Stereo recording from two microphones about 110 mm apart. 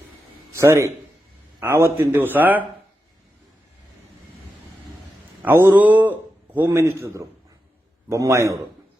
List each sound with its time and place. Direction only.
0.5 s a man's voice: 25° right (ahead or behind)
5.4 s a man's voice: 20° right (ahead or behind)